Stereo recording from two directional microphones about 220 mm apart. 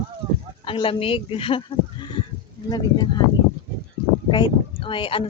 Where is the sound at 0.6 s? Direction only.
25° left (ahead or behind).